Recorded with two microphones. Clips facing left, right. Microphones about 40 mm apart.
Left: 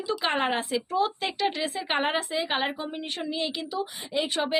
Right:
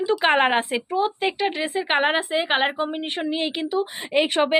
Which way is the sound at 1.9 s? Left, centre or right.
Right.